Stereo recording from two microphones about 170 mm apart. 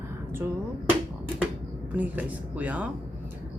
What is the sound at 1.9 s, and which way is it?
Speech, 10° right (ahead or behind).